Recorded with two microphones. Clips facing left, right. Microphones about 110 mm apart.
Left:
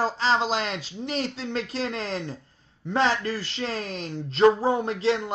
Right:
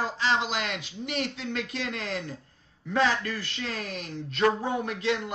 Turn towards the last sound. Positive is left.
turn(degrees=30)  # may be behind; listen again after turning